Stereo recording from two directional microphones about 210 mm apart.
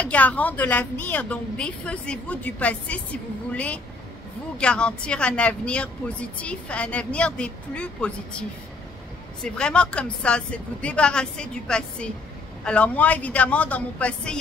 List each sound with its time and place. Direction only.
0.0 s a woman's voice: 5° left (ahead or behind)